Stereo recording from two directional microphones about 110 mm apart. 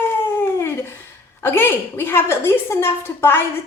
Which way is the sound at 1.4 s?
20° left (ahead or behind).